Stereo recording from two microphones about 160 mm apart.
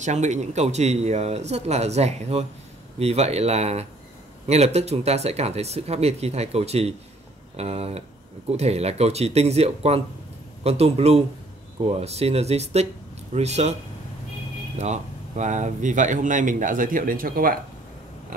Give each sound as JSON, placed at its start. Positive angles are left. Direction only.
{"t": 0.0, "sound": "speech", "side_deg": -50}
{"t": 14.8, "sound": "speech", "side_deg": -45}